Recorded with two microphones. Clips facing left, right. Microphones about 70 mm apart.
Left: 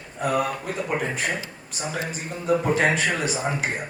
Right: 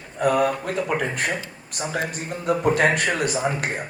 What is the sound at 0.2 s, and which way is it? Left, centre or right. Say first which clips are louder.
Speech: right 4 dB; right.